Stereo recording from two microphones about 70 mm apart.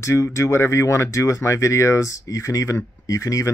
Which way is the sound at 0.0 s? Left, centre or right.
Left.